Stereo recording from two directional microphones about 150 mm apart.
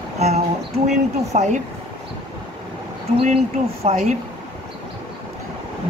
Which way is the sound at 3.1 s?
40° right (ahead or behind).